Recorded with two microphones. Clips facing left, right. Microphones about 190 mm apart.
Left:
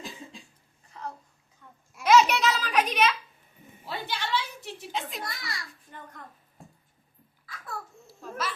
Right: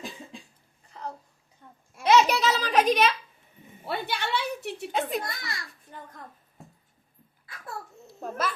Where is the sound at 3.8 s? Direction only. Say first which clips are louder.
Right 3 dB; 60° right (ahead or behind).